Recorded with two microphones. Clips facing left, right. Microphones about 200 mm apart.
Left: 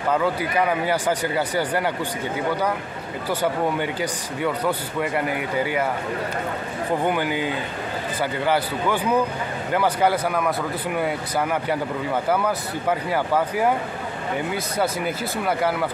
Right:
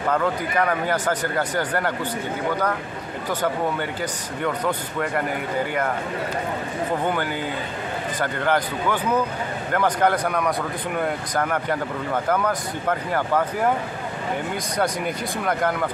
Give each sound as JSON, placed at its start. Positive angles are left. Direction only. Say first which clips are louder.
{"t": 0.1, "sound": "speech", "louder": "left 1 dB", "side_deg": 10}
{"t": 3.3, "sound": "speech", "louder": "left 1 dB", "side_deg": 10}
{"t": 7.1, "sound": "speech", "louder": "left 2 dB", "side_deg": 10}